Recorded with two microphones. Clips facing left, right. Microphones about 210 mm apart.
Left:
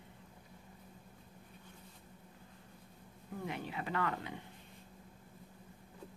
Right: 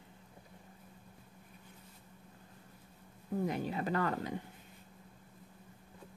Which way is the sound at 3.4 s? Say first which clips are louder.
Right 3 dB; 40° right (ahead or behind).